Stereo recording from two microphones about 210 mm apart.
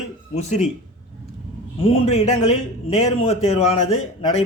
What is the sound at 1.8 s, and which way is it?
A man's voice, 30° left (ahead or behind).